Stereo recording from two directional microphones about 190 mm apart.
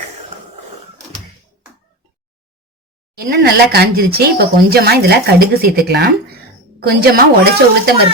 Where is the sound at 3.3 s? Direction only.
55° right (ahead or behind).